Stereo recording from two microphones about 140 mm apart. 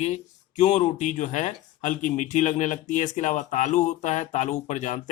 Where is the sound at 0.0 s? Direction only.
55° left (ahead or behind).